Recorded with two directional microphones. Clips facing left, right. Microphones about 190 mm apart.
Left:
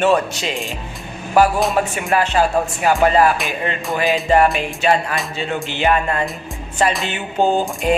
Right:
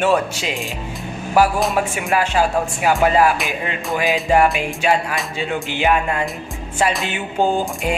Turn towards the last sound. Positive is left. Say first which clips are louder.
# left 3 dB
turn(degrees=-5)  # may be behind; listen again after turning